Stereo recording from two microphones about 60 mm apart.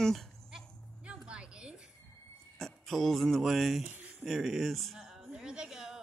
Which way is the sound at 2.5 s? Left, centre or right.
Centre.